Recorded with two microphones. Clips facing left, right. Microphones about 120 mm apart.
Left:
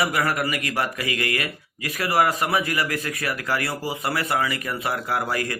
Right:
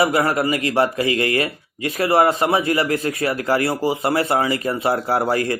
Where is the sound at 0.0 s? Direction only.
25° right (ahead or behind).